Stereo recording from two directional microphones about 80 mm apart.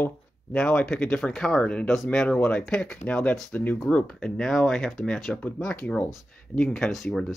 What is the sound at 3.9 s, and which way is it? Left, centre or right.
Speech, centre.